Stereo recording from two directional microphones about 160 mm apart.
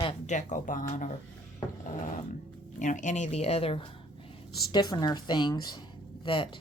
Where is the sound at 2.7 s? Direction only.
50° left (ahead or behind); by 6.6 s 30° left (ahead or behind).